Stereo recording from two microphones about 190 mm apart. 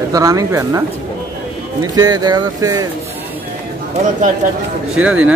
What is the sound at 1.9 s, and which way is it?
Speech, 20° right (ahead or behind).